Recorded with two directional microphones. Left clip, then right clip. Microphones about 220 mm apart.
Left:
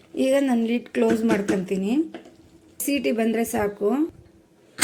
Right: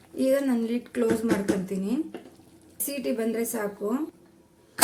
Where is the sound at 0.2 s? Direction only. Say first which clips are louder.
Left 3 dB; 15° left (ahead or behind).